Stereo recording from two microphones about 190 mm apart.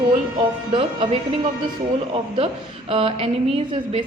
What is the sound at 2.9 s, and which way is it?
Speech, 30° right (ahead or behind).